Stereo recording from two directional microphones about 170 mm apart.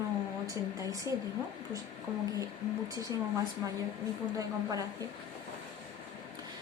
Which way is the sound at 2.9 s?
20° right (ahead or behind).